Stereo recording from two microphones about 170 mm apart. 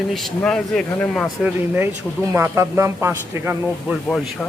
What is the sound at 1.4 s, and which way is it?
A man's voice, 15° right (ahead or behind).